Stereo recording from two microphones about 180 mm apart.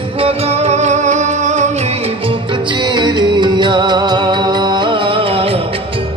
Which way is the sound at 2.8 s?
25° right (ahead or behind).